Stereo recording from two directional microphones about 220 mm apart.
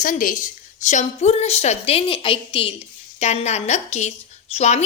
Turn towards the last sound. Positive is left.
turn(degrees=30)  # may be behind; listen again after turning